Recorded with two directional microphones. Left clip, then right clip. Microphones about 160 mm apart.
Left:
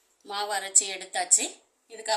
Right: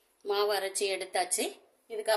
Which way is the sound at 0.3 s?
55° right (ahead or behind).